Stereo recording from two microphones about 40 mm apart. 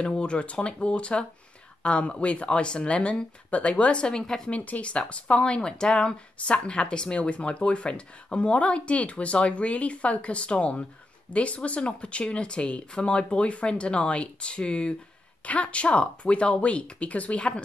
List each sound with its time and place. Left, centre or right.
0.0 s speech: left
4.5 s speech: left